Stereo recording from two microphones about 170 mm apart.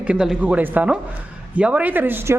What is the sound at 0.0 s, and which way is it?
A man's voice, 5° right (ahead or behind).